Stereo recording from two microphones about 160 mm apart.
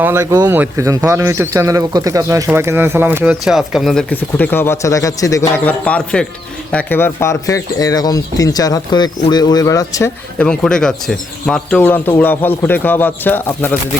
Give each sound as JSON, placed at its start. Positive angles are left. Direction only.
{"t": 0.0, "sound": "speech", "side_deg": -15}
{"t": 4.1, "sound": "speech", "side_deg": 10}
{"t": 10.3, "sound": "speech", "side_deg": 5}